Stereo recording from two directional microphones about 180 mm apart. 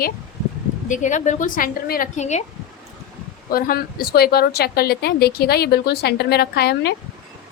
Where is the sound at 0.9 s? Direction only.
45° left (ahead or behind).